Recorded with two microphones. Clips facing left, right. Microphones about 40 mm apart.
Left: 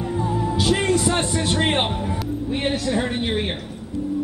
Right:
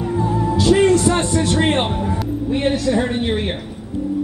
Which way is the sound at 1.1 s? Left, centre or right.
Left.